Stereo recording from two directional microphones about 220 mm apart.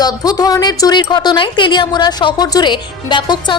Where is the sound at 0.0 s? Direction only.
15° left (ahead or behind).